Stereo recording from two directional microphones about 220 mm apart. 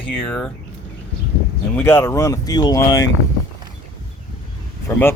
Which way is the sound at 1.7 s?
10° left (ahead or behind).